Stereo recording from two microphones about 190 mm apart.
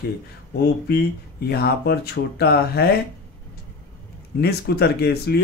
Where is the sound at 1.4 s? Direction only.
55° left (ahead or behind).